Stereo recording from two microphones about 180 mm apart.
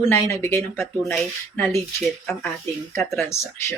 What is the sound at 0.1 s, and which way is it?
Speech, 15° left (ahead or behind).